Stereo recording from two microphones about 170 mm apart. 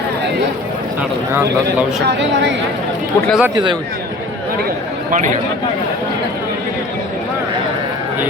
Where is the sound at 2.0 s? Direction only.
90° right.